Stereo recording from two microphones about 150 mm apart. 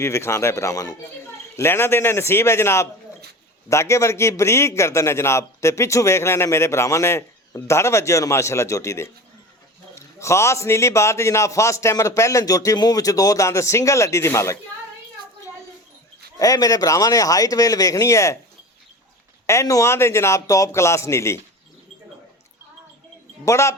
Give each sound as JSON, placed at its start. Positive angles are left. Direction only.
{"t": 0.0, "sound": "a man's voice", "side_deg": 20}
{"t": 16.4, "sound": "a man's voice", "side_deg": 25}
{"t": 19.5, "sound": "a man's voice", "side_deg": 20}
{"t": 23.5, "sound": "a man's voice", "side_deg": 20}